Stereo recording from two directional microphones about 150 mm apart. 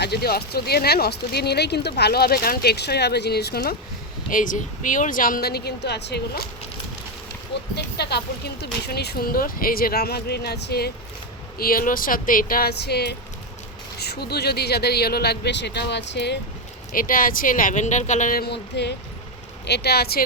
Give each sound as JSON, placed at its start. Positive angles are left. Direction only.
{"t": 0.0, "sound": "speech", "side_deg": 90}
{"t": 4.3, "sound": "speech", "side_deg": 60}
{"t": 7.8, "sound": "speech", "side_deg": 90}
{"t": 11.5, "sound": "speech", "side_deg": 75}
{"t": 16.9, "sound": "speech", "side_deg": 70}